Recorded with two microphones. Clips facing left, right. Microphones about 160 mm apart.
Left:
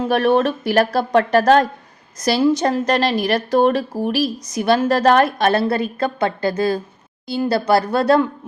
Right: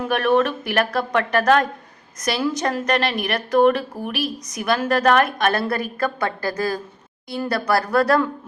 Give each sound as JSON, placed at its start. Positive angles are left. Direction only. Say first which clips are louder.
{"t": 0.1, "sound": "a woman's voice", "louder": "left 2 dB", "side_deg": 35}